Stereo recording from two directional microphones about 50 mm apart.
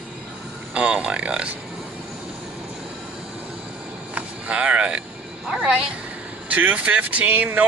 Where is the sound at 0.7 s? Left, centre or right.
Right.